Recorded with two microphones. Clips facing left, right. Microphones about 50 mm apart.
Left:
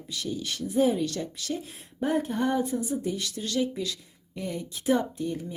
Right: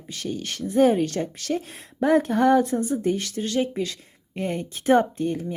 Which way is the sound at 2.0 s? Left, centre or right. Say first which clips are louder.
Right 7 dB; right.